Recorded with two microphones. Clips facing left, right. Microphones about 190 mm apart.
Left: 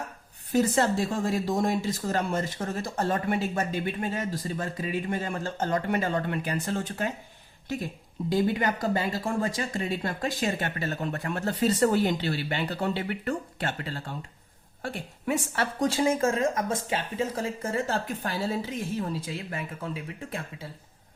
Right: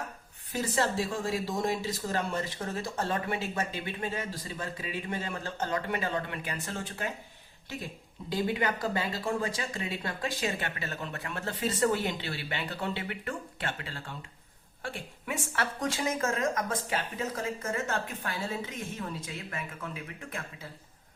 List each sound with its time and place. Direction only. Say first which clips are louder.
1.3 s speech: left 4 dB; 50° left (ahead or behind)
8.3 s speech: left 4 dB; 45° left (ahead or behind)